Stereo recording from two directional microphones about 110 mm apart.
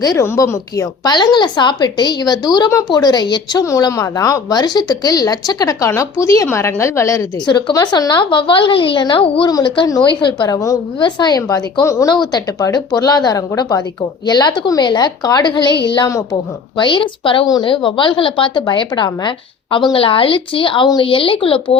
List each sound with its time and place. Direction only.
0.2 s speech: 25° left (ahead or behind)
1.0 s a woman's voice: 40° left (ahead or behind)
9.8 s a woman's voice: 40° left (ahead or behind)
10.9 s a woman's voice: 45° left (ahead or behind); by 12.1 s 30° left (ahead or behind)
12.1 s a woman's voice: 40° left (ahead or behind)
16.0 s a woman's voice: 30° left (ahead or behind)
16.7 s a woman's voice: 45° left (ahead or behind)